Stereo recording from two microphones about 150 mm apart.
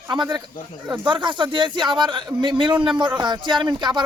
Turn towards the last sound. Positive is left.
turn(degrees=-30)  # may be behind; listen again after turning